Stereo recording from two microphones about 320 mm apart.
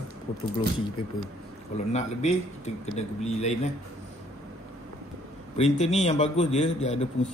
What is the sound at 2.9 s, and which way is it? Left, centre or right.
Speech, left.